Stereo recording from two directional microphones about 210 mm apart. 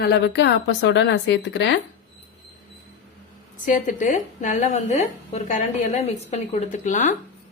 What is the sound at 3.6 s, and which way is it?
A woman's voice, 40° left (ahead or behind).